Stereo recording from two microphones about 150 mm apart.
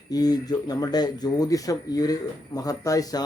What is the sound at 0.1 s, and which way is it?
Speech, 25° left (ahead or behind).